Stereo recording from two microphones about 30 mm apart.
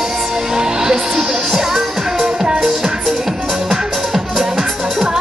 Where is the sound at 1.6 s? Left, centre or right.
Centre.